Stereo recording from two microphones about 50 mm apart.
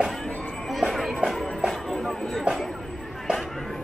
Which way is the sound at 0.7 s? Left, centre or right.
Centre.